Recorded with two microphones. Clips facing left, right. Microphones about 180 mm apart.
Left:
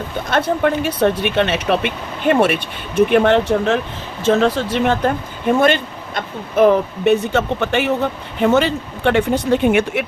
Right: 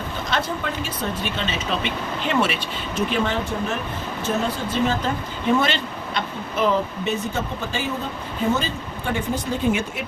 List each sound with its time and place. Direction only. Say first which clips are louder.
0.3 s speech: left 10 dB; 55° left (ahead or behind)
4.2 s speech: left 10 dB; 90° left; by 10.1 s 65° left (ahead or behind)